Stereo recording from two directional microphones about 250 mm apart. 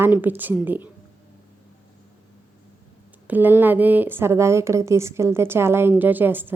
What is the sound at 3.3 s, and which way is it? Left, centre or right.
Speech, centre.